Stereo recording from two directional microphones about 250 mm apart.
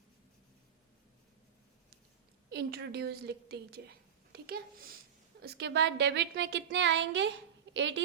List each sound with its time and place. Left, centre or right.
2.5 s a woman's voice: right